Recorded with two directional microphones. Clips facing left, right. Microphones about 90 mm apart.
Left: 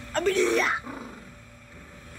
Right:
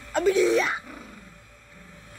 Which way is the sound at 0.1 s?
10° right (ahead or behind).